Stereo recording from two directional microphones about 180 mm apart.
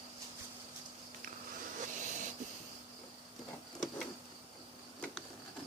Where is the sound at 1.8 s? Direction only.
45° right (ahead or behind).